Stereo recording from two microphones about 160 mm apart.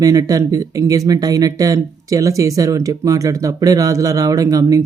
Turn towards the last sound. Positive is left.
turn(degrees=-20)  # may be behind; listen again after turning